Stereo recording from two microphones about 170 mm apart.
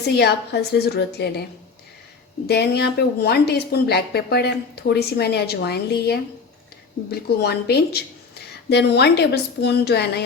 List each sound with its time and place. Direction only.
0.2 s a woman's voice: 75° left (ahead or behind)
2.5 s a woman's voice: 70° left (ahead or behind)